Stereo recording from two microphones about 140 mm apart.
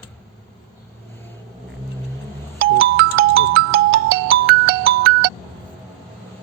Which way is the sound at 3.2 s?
90° right.